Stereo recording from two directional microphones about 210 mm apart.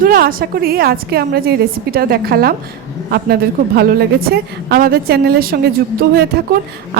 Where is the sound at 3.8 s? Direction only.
50° right (ahead or behind).